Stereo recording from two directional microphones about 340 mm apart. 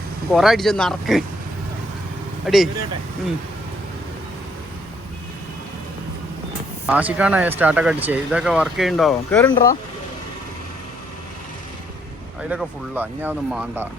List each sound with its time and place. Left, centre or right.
0.3 s speech: centre
2.5 s speech: centre
6.8 s speech: centre
12.4 s speech: centre